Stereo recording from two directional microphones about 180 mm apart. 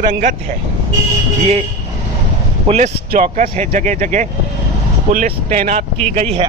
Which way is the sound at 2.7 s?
45° right (ahead or behind).